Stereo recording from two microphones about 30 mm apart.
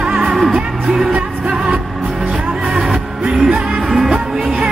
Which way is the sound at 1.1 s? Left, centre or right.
Right.